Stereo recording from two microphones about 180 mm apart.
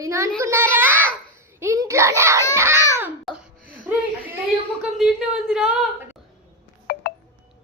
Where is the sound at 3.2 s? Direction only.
5° right (ahead or behind).